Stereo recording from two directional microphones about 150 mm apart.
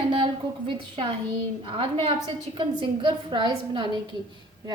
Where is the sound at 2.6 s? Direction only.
35° right (ahead or behind).